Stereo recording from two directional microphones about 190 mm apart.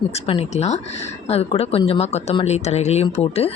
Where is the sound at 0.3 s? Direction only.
30° left (ahead or behind).